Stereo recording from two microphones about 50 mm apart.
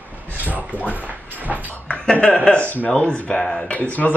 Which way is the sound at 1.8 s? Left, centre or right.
Left.